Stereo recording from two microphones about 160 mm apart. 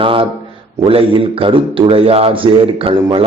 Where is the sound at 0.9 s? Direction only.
35° right (ahead or behind).